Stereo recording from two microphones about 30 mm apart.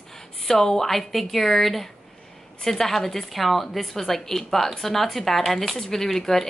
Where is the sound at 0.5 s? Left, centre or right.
Centre.